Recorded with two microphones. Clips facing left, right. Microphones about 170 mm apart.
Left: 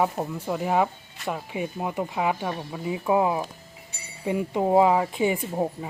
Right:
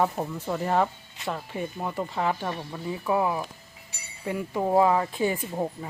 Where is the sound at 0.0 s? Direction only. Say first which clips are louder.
Left 1 dB; 10° left (ahead or behind).